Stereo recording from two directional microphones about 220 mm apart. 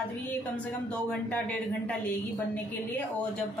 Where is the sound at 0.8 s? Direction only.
5° left (ahead or behind).